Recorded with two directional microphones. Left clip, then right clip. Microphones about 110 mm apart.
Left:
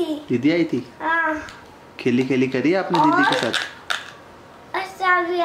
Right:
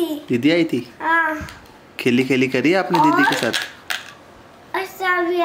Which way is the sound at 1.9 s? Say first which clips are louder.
Right 3 dB; 25° right (ahead or behind).